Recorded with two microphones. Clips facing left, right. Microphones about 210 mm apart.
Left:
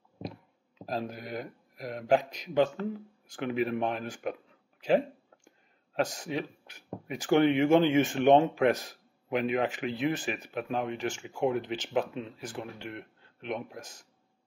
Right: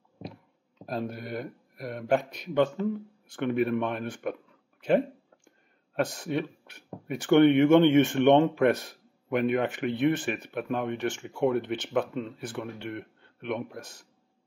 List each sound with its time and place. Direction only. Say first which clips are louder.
0.8 s speech: right 2 dB; 55° right (ahead or behind)
6.0 s speech: right 4 dB; 60° right (ahead or behind)